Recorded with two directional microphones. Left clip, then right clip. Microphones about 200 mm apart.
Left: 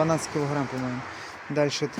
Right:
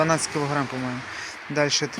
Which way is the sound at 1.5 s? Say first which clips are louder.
Right 2 dB; 5° right (ahead or behind).